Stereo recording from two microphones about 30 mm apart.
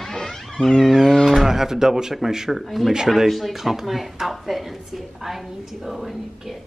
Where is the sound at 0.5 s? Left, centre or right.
Left.